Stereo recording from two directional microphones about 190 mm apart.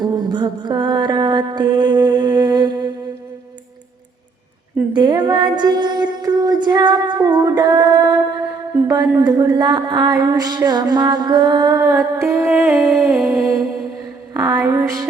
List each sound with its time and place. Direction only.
0.0 s mantra: 20° right (ahead or behind)
4.9 s a sound: 20° right (ahead or behind)
12.5 s music: centre (ahead or behind)
14.3 s a woman's voice: 20° right (ahead or behind)